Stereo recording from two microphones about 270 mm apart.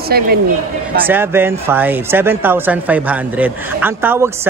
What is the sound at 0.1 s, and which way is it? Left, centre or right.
Speech, right.